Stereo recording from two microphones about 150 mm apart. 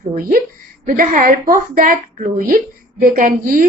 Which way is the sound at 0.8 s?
60° right (ahead or behind).